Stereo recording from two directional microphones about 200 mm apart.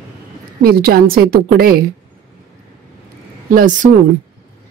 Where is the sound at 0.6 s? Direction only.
50° right (ahead or behind).